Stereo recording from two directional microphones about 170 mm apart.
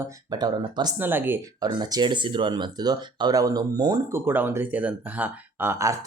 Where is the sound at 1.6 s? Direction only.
25° right (ahead or behind).